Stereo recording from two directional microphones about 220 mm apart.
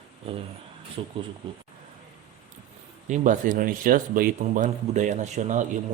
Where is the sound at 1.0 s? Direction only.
25° right (ahead or behind).